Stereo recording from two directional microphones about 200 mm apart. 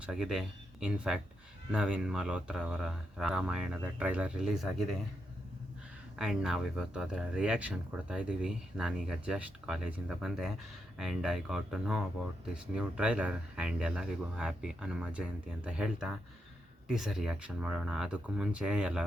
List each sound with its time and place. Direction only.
0.0 s speech: 5° right (ahead or behind)
6.1 s speech: 5° right (ahead or behind)